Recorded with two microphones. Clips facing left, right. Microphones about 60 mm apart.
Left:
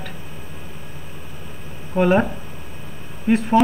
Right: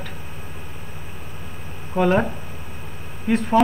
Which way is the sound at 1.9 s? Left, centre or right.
Centre.